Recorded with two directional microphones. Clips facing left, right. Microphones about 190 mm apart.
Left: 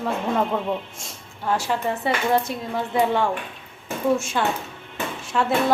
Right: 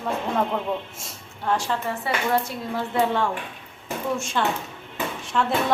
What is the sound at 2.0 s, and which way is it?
Speech, 15° left (ahead or behind).